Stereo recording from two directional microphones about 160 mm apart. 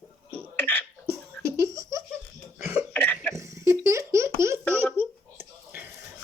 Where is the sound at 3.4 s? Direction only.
20° right (ahead or behind).